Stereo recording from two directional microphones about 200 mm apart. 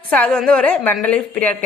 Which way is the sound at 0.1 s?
5° left (ahead or behind).